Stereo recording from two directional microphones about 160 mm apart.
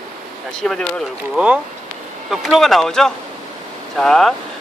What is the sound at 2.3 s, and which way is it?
Speech, centre (ahead or behind).